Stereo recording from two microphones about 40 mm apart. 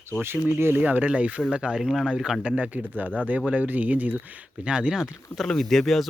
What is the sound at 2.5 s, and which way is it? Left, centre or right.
Speech, right.